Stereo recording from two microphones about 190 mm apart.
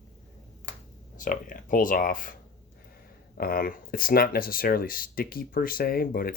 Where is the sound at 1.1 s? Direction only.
45° left (ahead or behind).